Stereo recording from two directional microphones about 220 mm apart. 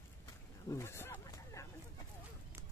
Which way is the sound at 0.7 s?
10° left (ahead or behind).